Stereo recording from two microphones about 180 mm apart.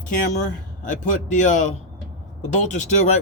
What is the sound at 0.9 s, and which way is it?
A man's voice, 45° left (ahead or behind).